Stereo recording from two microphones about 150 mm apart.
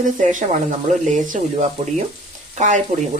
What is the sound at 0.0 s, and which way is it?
Speech, 55° right (ahead or behind).